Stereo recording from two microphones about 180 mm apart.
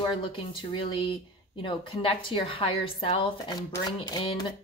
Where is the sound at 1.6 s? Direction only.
30° left (ahead or behind).